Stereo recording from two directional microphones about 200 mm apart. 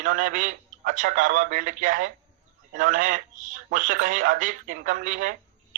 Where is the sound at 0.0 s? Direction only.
40° right (ahead or behind).